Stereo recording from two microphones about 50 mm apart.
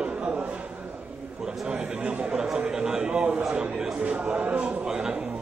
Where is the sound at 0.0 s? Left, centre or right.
Right.